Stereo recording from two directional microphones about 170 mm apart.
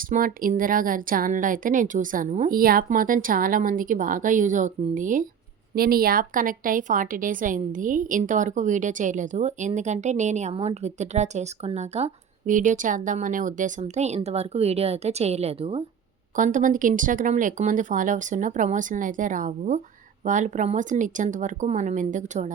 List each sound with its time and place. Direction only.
0.1 s a woman's voice: 55° right (ahead or behind)
5.7 s a woman's voice: 60° right (ahead or behind); by 15.8 s 35° right (ahead or behind)
16.3 s a woman's voice: 50° right (ahead or behind)